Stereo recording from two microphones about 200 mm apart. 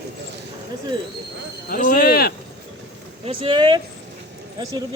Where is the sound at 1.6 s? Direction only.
45° left (ahead or behind).